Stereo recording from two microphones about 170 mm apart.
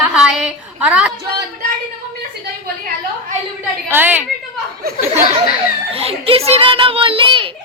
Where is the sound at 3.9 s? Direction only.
10° right (ahead or behind).